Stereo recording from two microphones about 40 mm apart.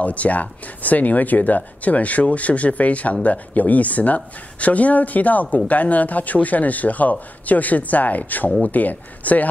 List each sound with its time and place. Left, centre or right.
0.0 s speech: left